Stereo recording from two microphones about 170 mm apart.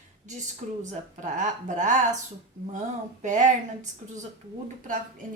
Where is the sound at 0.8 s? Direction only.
45° right (ahead or behind).